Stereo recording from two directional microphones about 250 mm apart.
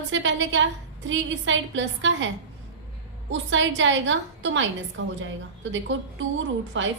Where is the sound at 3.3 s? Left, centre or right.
Right.